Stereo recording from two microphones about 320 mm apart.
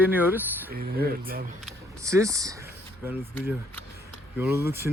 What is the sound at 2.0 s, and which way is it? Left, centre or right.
Speech, centre.